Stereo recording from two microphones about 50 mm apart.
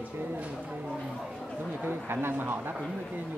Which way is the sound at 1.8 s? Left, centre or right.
Right.